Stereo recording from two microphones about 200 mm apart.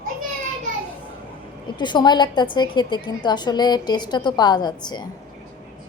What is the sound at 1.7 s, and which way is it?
A woman's voice, 20° left (ahead or behind).